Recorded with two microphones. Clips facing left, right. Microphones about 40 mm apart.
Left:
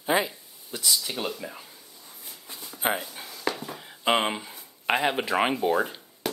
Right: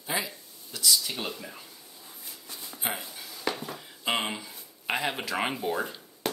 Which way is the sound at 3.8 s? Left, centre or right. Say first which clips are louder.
Left 6 dB; centre.